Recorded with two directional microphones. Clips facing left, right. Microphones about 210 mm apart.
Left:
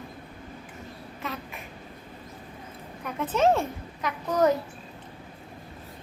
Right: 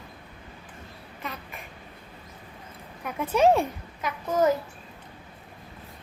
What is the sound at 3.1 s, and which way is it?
Speech, 15° right (ahead or behind).